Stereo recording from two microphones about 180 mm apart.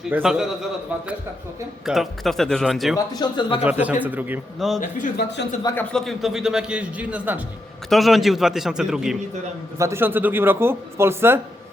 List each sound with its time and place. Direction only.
0.1 s a man's voice: 5° right (ahead or behind)
1.9 s a man's voice: centre (ahead or behind)
3.1 s speech: 25° left (ahead or behind)
3.6 s speech: 10° right (ahead or behind)
4.8 s speech: 45° left (ahead or behind)
5.6 s a man's voice: 10° left (ahead or behind)
9.7 s speech: 15° right (ahead or behind)